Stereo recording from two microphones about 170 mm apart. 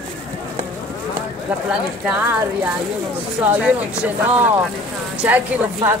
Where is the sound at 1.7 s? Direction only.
5° right (ahead or behind).